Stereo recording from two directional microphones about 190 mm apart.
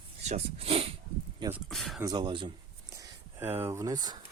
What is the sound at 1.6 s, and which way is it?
Speech, centre (ahead or behind).